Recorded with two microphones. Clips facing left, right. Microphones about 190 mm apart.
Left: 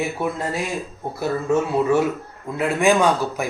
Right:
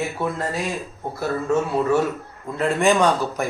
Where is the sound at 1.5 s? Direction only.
10° left (ahead or behind).